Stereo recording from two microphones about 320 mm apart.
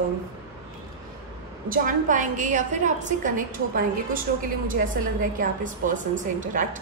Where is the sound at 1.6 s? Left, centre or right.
Right.